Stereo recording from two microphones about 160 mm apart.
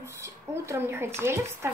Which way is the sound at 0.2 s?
15° right (ahead or behind).